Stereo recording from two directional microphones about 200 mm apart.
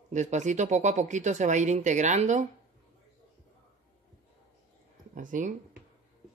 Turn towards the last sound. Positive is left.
turn(degrees=-40)  # may be behind; listen again after turning